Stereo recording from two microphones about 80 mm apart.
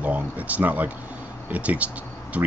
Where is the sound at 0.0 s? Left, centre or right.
Centre.